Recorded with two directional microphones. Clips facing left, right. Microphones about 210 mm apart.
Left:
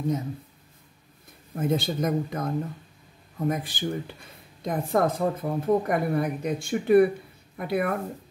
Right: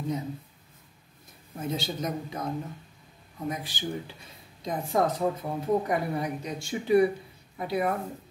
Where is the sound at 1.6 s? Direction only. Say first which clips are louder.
Left 6 dB; 55° left (ahead or behind).